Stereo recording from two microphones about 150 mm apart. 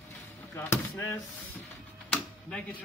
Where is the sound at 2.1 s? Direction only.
5° left (ahead or behind).